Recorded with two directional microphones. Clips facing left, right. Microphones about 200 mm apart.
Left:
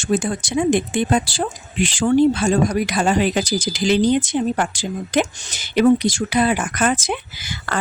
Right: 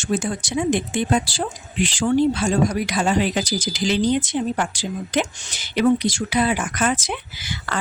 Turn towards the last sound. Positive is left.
turn(degrees=45)  # may be behind; listen again after turning